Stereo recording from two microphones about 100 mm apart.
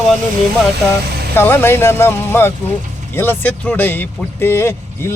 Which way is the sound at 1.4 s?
20° left (ahead or behind).